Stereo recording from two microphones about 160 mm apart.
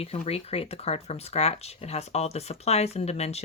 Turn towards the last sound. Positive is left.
turn(degrees=40)  # may be behind; listen again after turning